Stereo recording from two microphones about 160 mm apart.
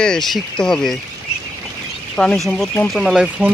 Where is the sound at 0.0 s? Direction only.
5° left (ahead or behind).